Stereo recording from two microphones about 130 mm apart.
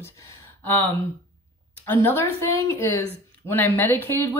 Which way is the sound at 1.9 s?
15° left (ahead or behind).